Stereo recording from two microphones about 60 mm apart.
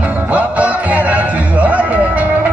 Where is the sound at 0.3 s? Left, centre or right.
Right.